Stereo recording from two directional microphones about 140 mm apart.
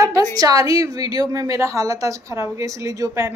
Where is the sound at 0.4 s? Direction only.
25° right (ahead or behind).